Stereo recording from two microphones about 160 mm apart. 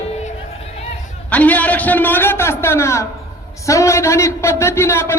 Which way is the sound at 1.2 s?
10° left (ahead or behind).